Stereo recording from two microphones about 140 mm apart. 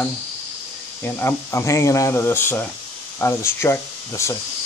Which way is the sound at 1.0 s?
15° left (ahead or behind).